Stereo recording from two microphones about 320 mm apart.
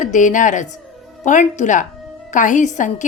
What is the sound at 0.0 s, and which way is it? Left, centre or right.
Speech, left.